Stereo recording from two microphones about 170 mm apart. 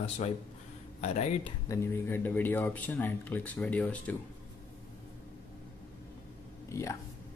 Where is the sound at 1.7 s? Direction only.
15° left (ahead or behind).